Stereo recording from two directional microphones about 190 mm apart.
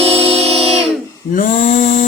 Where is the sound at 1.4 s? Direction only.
45° left (ahead or behind).